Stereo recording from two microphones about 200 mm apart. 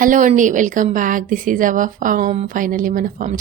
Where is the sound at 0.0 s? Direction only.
40° right (ahead or behind).